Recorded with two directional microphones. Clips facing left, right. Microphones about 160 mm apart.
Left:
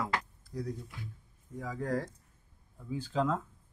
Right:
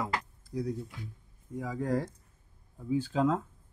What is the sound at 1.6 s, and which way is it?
Speech, 15° right (ahead or behind).